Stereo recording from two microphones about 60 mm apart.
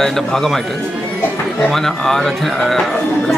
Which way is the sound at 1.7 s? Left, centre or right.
Centre.